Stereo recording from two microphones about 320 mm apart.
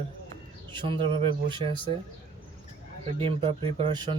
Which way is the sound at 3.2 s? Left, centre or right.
Centre.